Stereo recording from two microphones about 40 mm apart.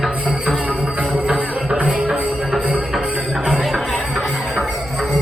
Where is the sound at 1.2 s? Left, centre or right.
Centre.